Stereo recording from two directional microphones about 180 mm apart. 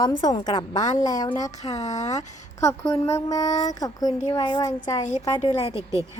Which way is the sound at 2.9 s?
15° left (ahead or behind).